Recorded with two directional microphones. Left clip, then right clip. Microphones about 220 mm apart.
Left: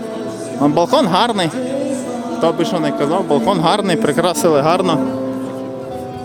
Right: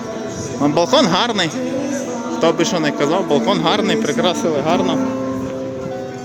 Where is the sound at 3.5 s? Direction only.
20° left (ahead or behind).